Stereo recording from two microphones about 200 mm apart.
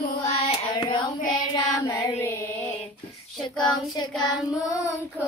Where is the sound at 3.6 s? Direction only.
20° left (ahead or behind).